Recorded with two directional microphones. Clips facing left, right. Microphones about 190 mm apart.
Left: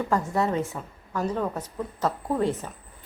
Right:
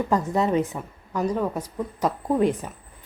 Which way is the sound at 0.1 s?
20° right (ahead or behind).